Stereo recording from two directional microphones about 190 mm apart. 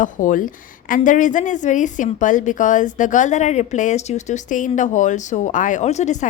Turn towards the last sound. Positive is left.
turn(degrees=35)  # may be behind; listen again after turning